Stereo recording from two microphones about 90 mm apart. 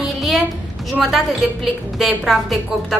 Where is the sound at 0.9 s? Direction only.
5° right (ahead or behind).